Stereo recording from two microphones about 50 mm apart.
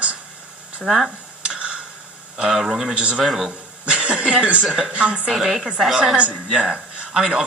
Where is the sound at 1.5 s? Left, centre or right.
Right.